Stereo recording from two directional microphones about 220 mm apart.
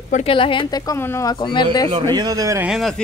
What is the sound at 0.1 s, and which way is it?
Speech, 25° left (ahead or behind).